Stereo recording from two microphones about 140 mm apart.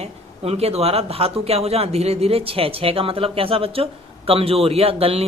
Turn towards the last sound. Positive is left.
turn(degrees=-45)  # may be behind; listen again after turning